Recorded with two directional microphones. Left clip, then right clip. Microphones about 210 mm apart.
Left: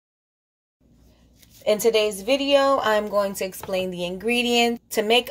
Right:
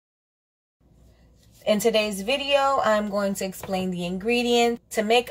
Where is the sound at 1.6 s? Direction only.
40° left (ahead or behind).